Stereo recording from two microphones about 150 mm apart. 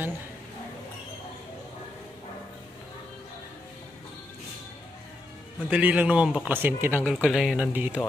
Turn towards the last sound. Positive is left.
turn(degrees=-10)  # may be behind; listen again after turning